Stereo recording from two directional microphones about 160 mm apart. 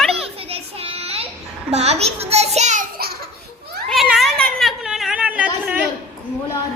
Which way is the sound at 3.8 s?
Centre (ahead or behind).